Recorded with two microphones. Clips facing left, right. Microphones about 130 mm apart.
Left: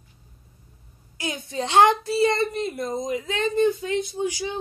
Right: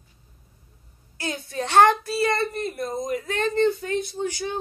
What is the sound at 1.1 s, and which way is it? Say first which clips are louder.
A woman's voice: even; 15° left (ahead or behind).